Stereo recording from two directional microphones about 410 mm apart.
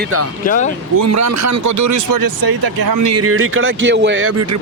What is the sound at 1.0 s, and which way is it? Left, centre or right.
Speech, right.